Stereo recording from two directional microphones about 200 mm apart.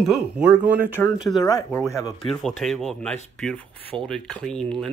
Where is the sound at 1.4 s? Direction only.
20° left (ahead or behind).